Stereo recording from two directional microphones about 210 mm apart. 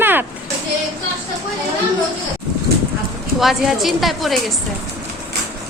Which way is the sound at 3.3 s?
Centre (ahead or behind).